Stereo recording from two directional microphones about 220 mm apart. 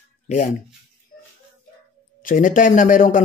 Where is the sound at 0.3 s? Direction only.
30° left (ahead or behind).